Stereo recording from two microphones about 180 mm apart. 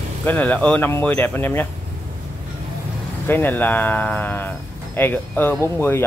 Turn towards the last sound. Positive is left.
turn(degrees=15)  # may be behind; listen again after turning